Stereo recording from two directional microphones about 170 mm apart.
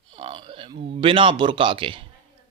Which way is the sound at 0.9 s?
30° right (ahead or behind).